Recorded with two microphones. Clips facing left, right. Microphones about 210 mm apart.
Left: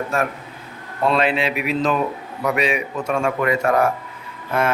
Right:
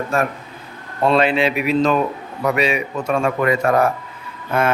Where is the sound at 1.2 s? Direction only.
Centre (ahead or behind).